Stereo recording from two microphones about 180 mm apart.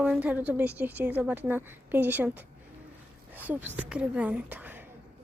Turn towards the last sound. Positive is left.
turn(degrees=-10)  # may be behind; listen again after turning